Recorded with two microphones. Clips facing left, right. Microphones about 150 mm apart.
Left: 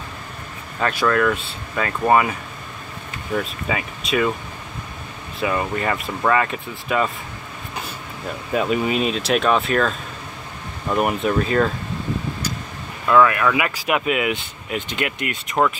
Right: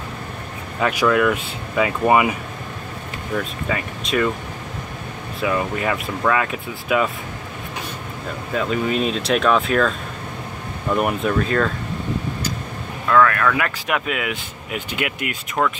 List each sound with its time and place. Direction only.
0.7 s speech: 10° right (ahead or behind)
3.6 s speech: 5° left (ahead or behind)
5.4 s speech: centre (ahead or behind)
8.5 s speech: 10° left (ahead or behind)
11.0 s speech: 5° left (ahead or behind)
13.1 s speech: 10° left (ahead or behind); by 15.3 s 5° right (ahead or behind)
15.6 s speech: 15° left (ahead or behind)